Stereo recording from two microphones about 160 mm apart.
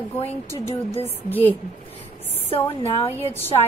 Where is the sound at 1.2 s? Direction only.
10° left (ahead or behind).